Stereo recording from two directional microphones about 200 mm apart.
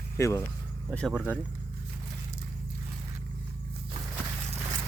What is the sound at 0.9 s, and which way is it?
Speech, centre (ahead or behind).